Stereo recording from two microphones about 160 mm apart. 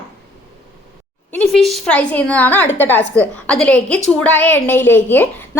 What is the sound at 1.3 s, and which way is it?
A woman's voice, 5° left (ahead or behind).